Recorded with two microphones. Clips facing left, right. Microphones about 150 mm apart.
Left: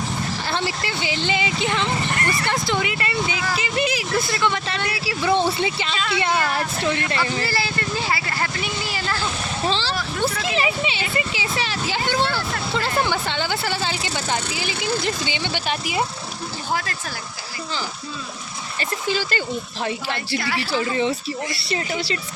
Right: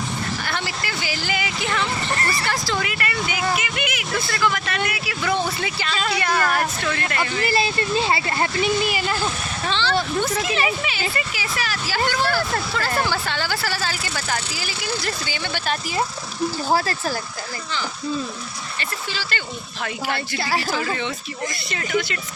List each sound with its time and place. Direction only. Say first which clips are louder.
0.4 s speech: left 3 dB; 30° left (ahead or behind)
2.1 s vehicle: left 1 dB; 35° right (ahead or behind)
2.5 s speech: left 2 dB; 25° left (ahead or behind)
7.4 s speech: right 4 dB; 20° right (ahead or behind)
9.6 s speech: right 3 dB; 35° left (ahead or behind); by 16.0 s 15° left (ahead or behind)
16.6 s speech: right 4 dB; 35° right (ahead or behind)
19.8 s speech: right 3 dB; 30° left (ahead or behind)
20.4 s speech: right 2 dB; 35° right (ahead or behind)
21.6 s speech: right 1 dB; 30° left (ahead or behind)